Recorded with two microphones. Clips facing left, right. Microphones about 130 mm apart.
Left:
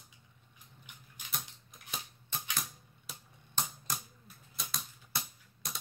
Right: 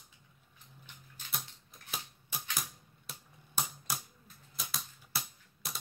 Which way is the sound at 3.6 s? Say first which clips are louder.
Even; 10° right (ahead or behind).